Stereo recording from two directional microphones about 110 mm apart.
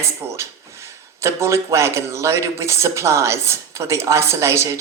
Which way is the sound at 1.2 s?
25° right (ahead or behind).